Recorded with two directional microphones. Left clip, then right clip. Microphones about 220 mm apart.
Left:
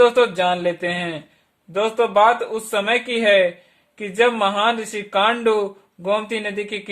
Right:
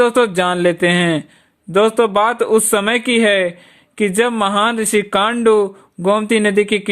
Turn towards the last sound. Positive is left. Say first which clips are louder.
# right 11 dB
turn(degrees=-40)  # may be behind; listen again after turning